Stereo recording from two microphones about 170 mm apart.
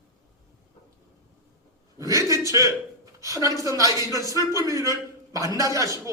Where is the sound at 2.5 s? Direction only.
20° right (ahead or behind).